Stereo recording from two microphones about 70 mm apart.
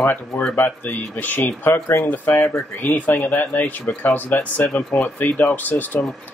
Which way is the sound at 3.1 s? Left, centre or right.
Left.